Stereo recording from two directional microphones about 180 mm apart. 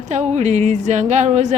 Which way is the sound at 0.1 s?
40° right (ahead or behind).